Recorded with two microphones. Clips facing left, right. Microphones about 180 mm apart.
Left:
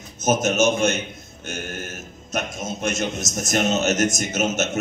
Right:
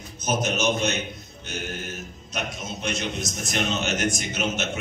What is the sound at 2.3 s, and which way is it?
A man's voice, 45° left (ahead or behind).